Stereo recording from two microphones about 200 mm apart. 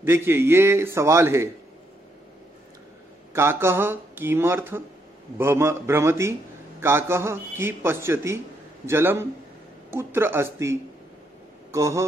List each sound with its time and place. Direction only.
0.0 s a man's voice: 10° right (ahead or behind)
3.3 s a man's voice: 15° right (ahead or behind)